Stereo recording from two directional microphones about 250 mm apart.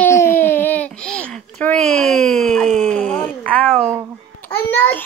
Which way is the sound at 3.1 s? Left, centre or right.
Centre.